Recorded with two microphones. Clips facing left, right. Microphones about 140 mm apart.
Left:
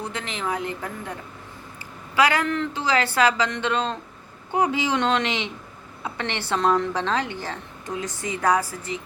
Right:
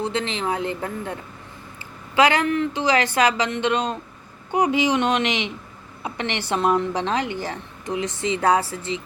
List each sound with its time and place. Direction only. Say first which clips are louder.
0.0 s speech: right 5 dB; 25° right (ahead or behind)
2.1 s a woman's voice: right 3 dB; 20° right (ahead or behind)